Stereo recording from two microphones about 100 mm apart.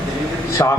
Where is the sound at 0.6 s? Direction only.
35° left (ahead or behind).